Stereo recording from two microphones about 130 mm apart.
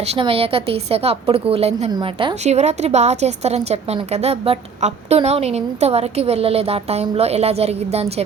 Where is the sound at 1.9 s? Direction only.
40° right (ahead or behind).